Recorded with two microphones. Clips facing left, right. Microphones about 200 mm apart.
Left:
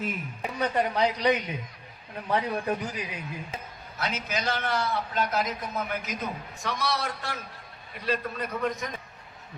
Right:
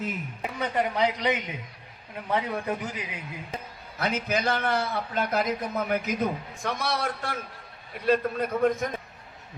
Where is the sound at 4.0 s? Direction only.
55° right (ahead or behind).